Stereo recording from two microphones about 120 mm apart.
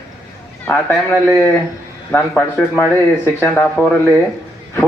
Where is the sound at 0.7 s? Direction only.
10° left (ahead or behind).